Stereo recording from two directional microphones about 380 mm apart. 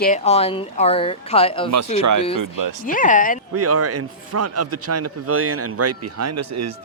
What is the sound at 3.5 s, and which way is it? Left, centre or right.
A man's voice, right.